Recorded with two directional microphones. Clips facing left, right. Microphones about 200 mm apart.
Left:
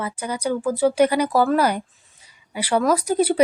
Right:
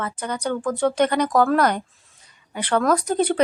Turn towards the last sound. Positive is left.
turn(degrees=5)  # may be behind; listen again after turning